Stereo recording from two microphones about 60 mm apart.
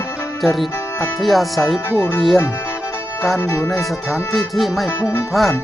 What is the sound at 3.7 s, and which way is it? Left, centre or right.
Speech, centre.